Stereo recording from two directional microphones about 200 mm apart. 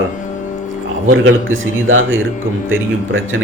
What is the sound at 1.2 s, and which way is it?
Speech, 85° right.